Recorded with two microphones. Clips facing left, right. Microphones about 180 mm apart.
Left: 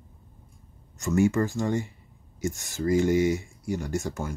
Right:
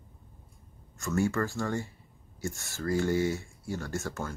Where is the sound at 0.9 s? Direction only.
20° left (ahead or behind).